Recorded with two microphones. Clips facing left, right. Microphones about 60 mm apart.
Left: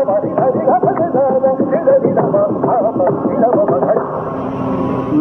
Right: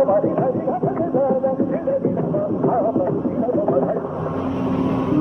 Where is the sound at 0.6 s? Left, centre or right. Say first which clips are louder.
Left 9 dB; left.